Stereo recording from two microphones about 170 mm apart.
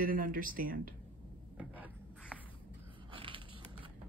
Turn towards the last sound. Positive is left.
turn(degrees=-30)  # may be behind; listen again after turning